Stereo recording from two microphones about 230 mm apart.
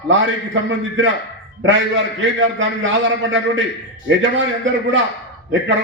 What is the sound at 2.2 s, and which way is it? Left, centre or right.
A man's voice, right.